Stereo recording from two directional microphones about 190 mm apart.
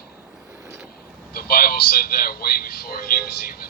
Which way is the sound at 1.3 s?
50° left (ahead or behind).